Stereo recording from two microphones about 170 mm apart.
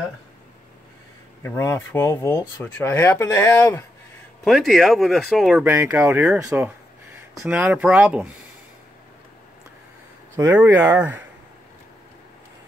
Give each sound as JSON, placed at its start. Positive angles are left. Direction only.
{"t": 1.4, "sound": "speech", "side_deg": 15}
{"t": 4.5, "sound": "speech", "side_deg": 0}
{"t": 5.6, "sound": "speech", "side_deg": -10}
{"t": 10.3, "sound": "speech", "side_deg": -15}